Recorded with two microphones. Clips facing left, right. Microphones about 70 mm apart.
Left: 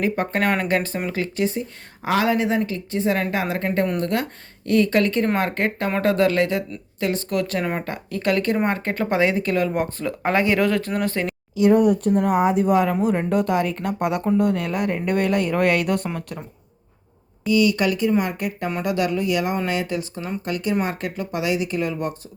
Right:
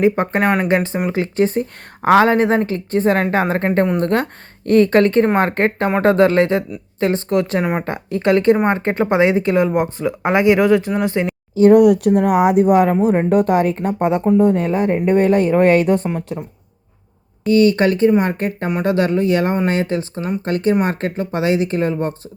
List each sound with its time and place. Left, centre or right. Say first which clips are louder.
0.0 s speech: right 6 dB; right
1.5 s a woman's voice: right 6 dB; right; by 11.3 s centre
11.7 s a woman's voice: right 6 dB; right
13.7 s speech: right 6 dB; right
17.4 s speech: right 6 dB; right